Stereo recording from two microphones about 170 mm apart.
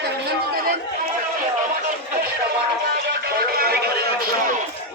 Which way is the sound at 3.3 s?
65° right (ahead or behind).